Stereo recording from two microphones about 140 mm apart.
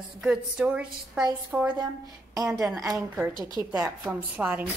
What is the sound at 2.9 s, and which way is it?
A woman's voice, 10° right (ahead or behind).